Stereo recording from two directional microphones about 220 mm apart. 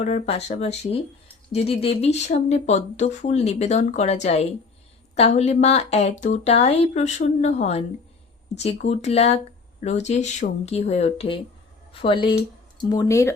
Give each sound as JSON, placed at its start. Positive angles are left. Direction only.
{"t": 0.0, "sound": "speech", "side_deg": 30}